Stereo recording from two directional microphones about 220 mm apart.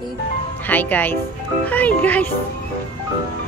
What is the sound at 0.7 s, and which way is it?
Music, 10° left (ahead or behind).